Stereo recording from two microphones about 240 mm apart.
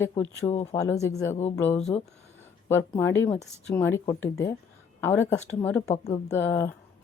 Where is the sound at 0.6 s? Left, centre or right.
Centre.